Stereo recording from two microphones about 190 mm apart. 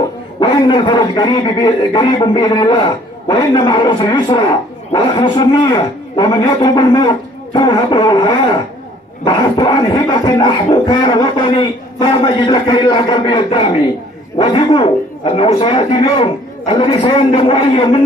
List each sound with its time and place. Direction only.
0.4 s speech: 25° left (ahead or behind)